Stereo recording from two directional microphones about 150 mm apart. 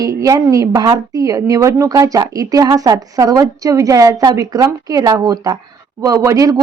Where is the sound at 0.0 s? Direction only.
25° right (ahead or behind).